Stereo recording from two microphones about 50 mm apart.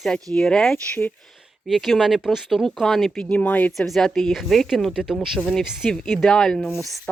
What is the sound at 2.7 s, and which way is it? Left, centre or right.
Speech, centre.